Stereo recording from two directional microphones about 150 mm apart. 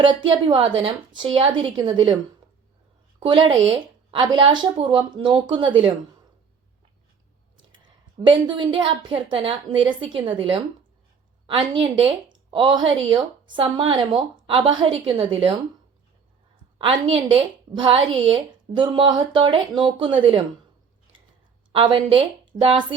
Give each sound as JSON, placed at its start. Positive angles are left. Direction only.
{"t": 0.0, "sound": "speech", "side_deg": -35}
{"t": 3.2, "sound": "speech", "side_deg": -35}
{"t": 7.7, "sound": "speech", "side_deg": -30}
{"t": 16.7, "sound": "speech", "side_deg": -35}
{"t": 21.7, "sound": "speech", "side_deg": -35}